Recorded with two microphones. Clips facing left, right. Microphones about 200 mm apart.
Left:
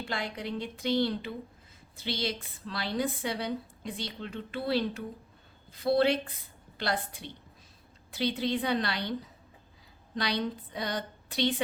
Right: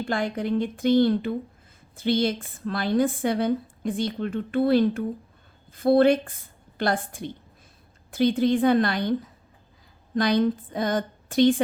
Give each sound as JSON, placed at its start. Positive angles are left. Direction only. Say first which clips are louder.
{"t": 0.0, "sound": "a woman's voice", "louder": "right 9 dB", "side_deg": -50}